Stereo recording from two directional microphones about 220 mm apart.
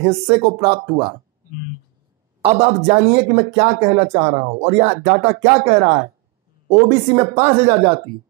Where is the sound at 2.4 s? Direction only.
30° right (ahead or behind).